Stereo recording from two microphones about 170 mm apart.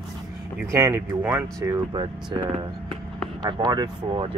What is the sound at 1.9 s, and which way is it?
Mantra, 25° right (ahead or behind).